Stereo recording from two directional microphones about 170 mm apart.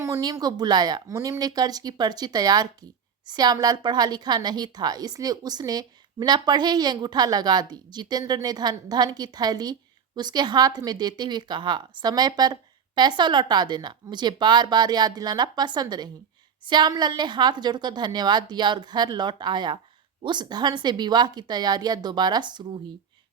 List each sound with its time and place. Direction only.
0.0 s a woman's voice: 20° right (ahead or behind)